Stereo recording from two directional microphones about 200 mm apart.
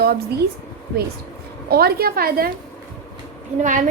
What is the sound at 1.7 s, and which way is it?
Speech, 50° right (ahead or behind).